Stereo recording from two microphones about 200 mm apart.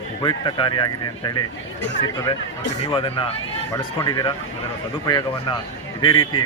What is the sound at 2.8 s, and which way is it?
Speech, 25° left (ahead or behind).